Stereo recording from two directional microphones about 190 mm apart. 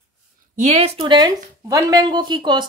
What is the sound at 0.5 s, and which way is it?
Speech, 40° right (ahead or behind).